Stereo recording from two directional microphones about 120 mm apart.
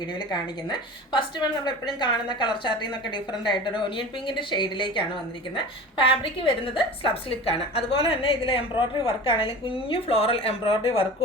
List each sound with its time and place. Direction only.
0.3 s a woman's voice: 40° left (ahead or behind)